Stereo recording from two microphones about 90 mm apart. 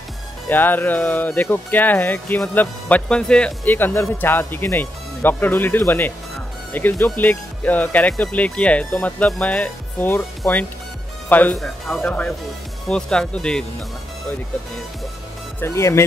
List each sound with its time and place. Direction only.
0.5 s speech: 20° left (ahead or behind)
3.7 s speech: 25° left (ahead or behind)
11.5 s speech: 5° left (ahead or behind)
15.6 s speech: 30° left (ahead or behind)